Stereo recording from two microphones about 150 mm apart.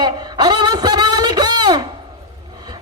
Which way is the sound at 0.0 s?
30° right (ahead or behind).